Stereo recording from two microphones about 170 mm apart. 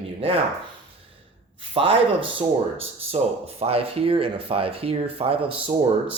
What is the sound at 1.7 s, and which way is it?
Speech, 30° right (ahead or behind).